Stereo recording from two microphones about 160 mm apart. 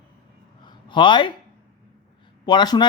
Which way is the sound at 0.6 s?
30° left (ahead or behind).